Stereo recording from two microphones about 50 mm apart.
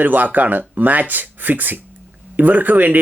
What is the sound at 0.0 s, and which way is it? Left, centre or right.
Speech, right.